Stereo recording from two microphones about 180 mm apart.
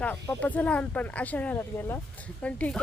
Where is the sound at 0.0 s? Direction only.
10° left (ahead or behind).